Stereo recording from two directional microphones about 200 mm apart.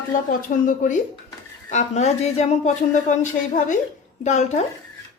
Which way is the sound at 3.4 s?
5° left (ahead or behind).